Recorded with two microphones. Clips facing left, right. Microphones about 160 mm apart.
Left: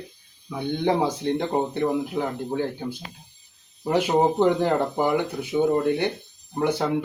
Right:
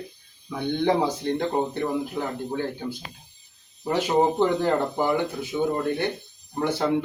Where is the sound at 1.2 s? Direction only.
15° left (ahead or behind).